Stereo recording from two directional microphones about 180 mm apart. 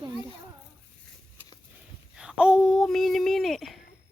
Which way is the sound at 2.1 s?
5° right (ahead or behind).